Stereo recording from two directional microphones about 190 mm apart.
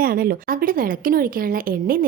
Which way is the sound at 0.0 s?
50° right (ahead or behind).